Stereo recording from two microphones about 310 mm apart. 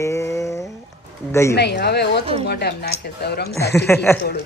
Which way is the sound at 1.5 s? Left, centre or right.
Left.